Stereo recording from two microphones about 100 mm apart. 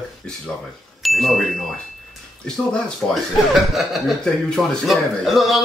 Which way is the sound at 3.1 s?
Centre (ahead or behind).